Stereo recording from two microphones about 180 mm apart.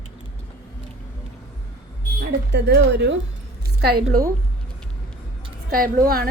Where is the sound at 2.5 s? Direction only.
70° right (ahead or behind).